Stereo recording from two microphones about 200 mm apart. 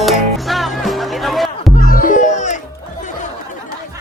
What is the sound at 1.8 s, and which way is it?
Music, 45° left (ahead or behind).